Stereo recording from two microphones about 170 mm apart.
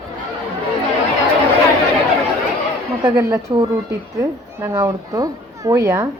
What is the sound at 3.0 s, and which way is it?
A woman's voice, 20° right (ahead or behind).